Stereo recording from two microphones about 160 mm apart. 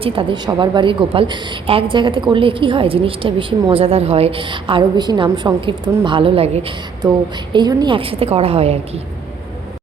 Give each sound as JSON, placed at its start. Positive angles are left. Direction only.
{"t": 0.0, "sound": "a woman's voice", "side_deg": -35}
{"t": 7.5, "sound": "a woman's voice", "side_deg": -25}